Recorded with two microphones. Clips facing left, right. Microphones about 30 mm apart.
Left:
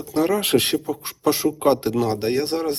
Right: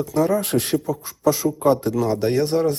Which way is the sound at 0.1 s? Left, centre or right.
Left.